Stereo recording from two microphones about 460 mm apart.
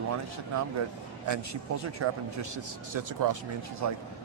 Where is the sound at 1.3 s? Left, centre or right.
Right.